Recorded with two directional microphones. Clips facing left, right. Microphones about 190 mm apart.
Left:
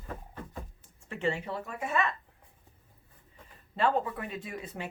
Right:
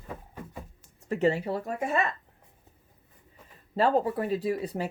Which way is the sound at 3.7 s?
40° right (ahead or behind).